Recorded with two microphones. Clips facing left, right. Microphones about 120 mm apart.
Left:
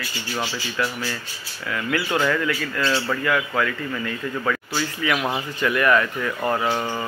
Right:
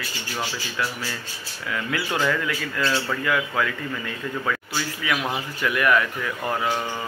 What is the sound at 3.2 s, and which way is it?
Speech, 10° right (ahead or behind).